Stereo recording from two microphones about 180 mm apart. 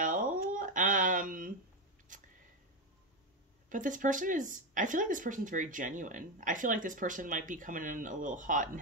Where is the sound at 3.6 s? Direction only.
45° right (ahead or behind).